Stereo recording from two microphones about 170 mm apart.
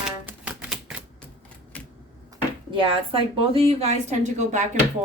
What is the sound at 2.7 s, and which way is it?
A woman's voice, 30° right (ahead or behind).